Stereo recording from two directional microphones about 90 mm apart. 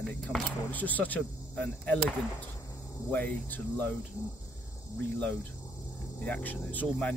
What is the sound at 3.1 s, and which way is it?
Speech, 20° left (ahead or behind).